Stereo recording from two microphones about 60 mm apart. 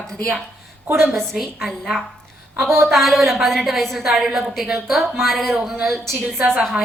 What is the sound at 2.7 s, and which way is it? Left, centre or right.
Speech, right.